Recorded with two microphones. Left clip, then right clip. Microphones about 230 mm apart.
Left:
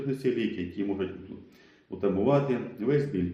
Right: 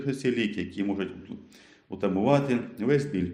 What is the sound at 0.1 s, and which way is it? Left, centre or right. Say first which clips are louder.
Speech: right 1 dB; right.